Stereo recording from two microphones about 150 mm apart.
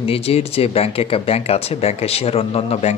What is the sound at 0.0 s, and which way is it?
Speech, 40° left (ahead or behind).